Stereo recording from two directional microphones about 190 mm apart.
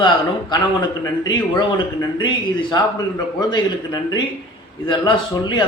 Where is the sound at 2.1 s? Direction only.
25° left (ahead or behind).